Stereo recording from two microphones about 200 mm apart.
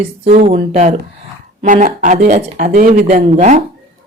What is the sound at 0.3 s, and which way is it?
Speech, 35° right (ahead or behind).